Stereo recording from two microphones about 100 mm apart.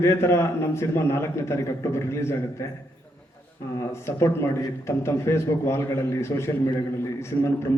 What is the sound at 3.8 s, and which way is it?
A man's voice, 30° left (ahead or behind).